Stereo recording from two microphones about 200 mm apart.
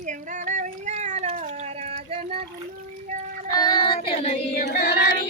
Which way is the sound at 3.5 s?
20° left (ahead or behind).